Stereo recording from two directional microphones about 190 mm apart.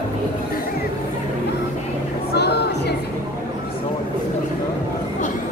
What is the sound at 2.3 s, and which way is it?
Music, 60° left (ahead or behind).